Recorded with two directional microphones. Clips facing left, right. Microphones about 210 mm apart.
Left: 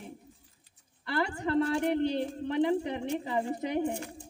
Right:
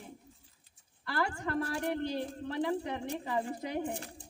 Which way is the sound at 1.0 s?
20° left (ahead or behind).